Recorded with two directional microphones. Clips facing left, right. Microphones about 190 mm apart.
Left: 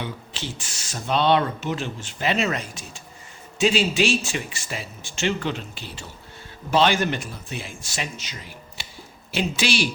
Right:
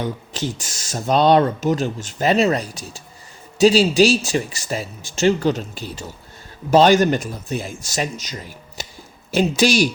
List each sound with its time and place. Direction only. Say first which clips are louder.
0.0 s speech: right 7 dB; 45° right (ahead or behind)